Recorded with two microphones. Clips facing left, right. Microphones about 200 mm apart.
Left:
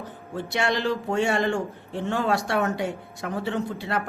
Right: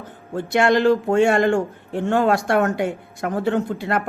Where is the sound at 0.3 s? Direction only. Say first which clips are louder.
Right 8 dB; 50° right (ahead or behind).